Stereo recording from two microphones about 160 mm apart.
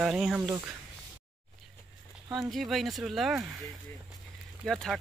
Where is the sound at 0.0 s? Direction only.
5° right (ahead or behind).